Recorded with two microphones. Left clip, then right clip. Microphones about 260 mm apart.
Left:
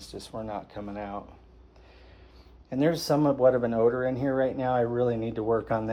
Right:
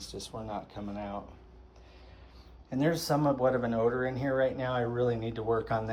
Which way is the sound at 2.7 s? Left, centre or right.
Left.